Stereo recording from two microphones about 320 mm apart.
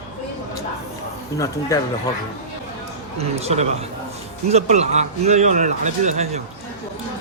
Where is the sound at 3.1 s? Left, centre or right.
Centre.